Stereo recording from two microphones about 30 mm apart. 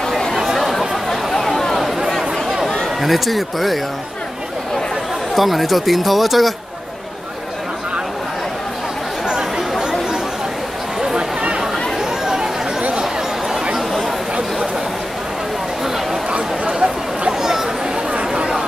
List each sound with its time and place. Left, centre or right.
0.6 s chatter: centre
3.0 s speech: centre
5.3 s speech: centre
9.2 s chatter: right
11.1 s a sound: right
12.0 s chatter: centre
16.3 s chatter: right
17.3 s a sound: centre
18.3 s chatter: right